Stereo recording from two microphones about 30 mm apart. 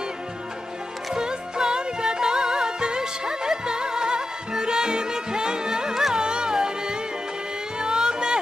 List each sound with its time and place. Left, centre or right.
1.1 s music: right
5.9 s music: centre
6.1 s music: right